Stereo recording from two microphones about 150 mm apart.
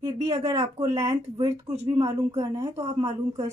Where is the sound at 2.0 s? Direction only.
20° right (ahead or behind).